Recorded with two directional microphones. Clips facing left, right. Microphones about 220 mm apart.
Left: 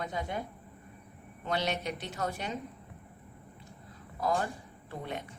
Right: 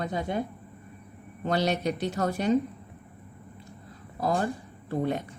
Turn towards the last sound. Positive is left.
turn(degrees=-40)  # may be behind; listen again after turning